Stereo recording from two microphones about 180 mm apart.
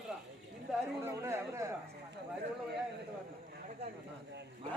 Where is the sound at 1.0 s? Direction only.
15° right (ahead or behind).